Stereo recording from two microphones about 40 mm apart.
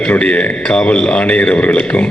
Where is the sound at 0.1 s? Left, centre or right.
Left.